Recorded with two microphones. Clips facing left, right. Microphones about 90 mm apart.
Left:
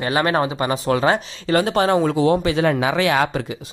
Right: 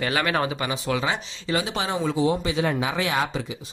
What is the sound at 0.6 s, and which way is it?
Speech, 40° left (ahead or behind).